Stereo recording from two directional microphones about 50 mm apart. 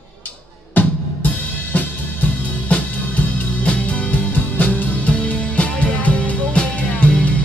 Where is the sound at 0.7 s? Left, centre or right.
Left.